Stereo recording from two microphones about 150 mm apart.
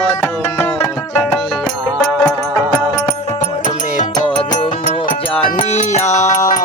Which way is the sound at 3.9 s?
55° left (ahead or behind).